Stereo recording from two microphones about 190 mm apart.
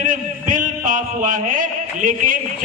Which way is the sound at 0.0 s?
45° right (ahead or behind).